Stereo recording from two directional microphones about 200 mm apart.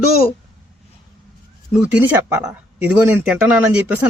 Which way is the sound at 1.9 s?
5° right (ahead or behind).